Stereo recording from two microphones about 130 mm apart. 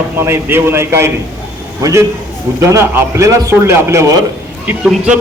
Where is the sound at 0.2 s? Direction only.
20° right (ahead or behind).